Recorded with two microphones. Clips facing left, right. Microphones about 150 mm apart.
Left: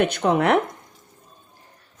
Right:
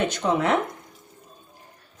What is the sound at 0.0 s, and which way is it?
Speech, 60° left (ahead or behind).